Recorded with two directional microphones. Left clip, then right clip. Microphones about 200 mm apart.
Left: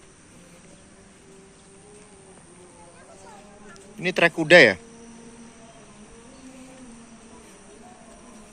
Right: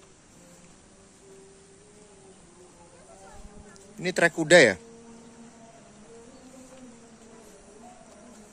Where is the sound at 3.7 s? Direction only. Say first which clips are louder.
Left 4 dB; 25° right (ahead or behind).